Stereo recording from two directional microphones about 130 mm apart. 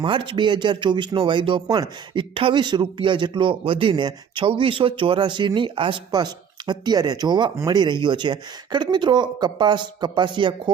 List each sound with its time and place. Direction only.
0.0 s speech: 40° right (ahead or behind)